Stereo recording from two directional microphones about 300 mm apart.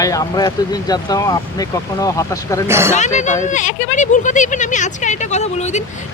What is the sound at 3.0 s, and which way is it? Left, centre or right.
Speech, left.